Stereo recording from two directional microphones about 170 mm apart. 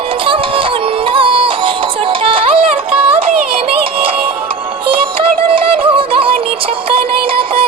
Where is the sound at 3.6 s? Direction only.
30° right (ahead or behind).